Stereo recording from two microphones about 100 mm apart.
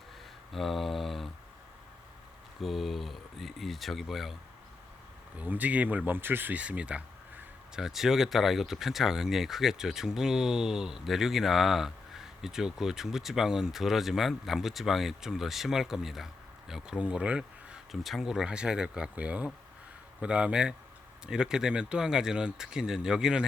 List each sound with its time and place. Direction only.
0.5 s speech: centre (ahead or behind)
2.6 s speech: centre (ahead or behind)
5.4 s speech: 15° right (ahead or behind)